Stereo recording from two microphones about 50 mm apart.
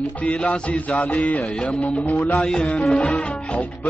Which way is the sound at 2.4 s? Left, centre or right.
Left.